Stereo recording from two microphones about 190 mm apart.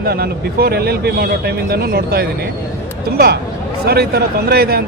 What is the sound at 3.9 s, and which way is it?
Speech, 55° right (ahead or behind).